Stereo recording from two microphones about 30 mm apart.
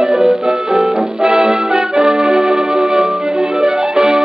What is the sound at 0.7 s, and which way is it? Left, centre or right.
Music, right.